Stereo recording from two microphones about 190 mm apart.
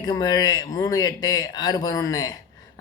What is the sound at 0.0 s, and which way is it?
Speech, 20° left (ahead or behind).